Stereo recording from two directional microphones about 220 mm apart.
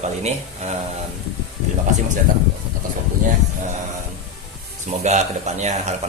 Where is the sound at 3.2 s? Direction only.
35° right (ahead or behind).